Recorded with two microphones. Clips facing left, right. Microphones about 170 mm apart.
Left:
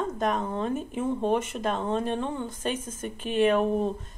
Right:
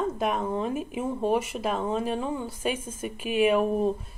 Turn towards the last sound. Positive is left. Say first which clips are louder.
# right 1 dB
turn(degrees=-5)  # may be behind; listen again after turning